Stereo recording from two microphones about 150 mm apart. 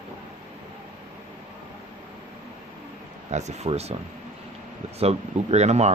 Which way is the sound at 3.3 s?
50° right (ahead or behind).